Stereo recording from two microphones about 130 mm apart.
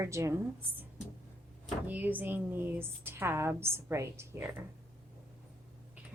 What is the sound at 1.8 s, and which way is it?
A woman's voice, 15° right (ahead or behind).